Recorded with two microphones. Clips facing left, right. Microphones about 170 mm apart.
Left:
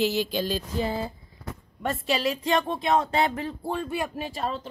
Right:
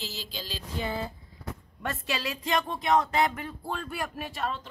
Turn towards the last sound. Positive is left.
turn(degrees=35)  # may be behind; listen again after turning